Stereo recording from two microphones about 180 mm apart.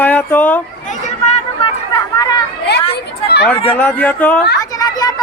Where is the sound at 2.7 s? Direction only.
65° left (ahead or behind).